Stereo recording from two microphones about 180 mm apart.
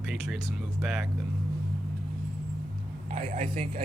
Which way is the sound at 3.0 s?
40° right (ahead or behind).